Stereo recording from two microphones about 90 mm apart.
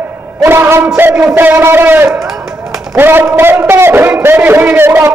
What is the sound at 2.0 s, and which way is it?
Speech, 5° right (ahead or behind).